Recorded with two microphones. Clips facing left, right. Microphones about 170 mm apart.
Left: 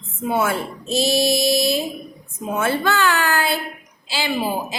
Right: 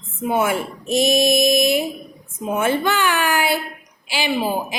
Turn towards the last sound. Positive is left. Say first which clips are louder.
# right 1 dB
turn(degrees=-15)  # may be behind; listen again after turning